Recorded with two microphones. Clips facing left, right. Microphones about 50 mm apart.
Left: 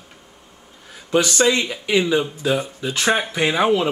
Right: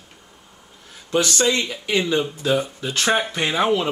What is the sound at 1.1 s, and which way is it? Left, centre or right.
Speech, centre.